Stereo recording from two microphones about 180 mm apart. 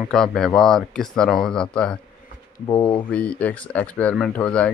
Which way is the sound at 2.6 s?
30° left (ahead or behind).